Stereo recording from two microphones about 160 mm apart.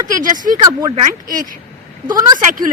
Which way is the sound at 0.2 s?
55° right (ahead or behind).